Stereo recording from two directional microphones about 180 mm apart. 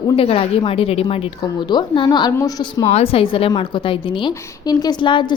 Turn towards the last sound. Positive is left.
turn(degrees=25)  # may be behind; listen again after turning